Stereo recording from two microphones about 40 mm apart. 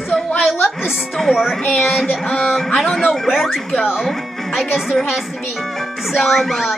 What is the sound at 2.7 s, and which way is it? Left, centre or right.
Speech, centre.